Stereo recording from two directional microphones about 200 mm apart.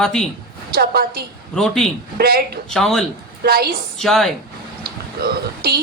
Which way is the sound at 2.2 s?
50° right (ahead or behind).